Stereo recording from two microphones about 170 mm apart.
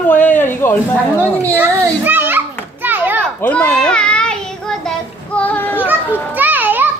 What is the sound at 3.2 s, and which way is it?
Child singing, 10° left (ahead or behind).